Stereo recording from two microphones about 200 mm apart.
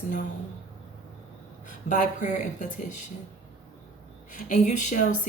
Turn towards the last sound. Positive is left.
turn(degrees=40)  # may be behind; listen again after turning